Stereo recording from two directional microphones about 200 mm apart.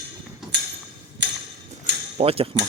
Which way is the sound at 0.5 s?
55° right (ahead or behind).